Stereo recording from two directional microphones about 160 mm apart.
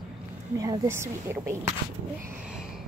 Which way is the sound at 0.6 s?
20° right (ahead or behind).